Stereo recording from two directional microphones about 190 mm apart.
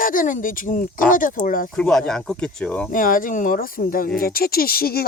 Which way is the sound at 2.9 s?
45° left (ahead or behind).